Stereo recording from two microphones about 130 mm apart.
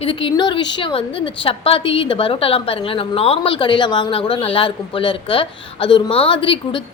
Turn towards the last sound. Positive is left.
turn(degrees=45)  # may be behind; listen again after turning